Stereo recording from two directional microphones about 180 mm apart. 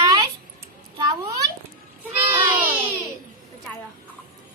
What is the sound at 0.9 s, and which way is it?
Speech, 25° right (ahead or behind).